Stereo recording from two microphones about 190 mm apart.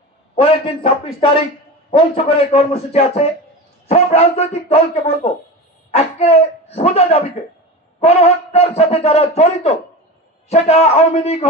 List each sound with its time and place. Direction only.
0.4 s a man's voice: 30° left (ahead or behind)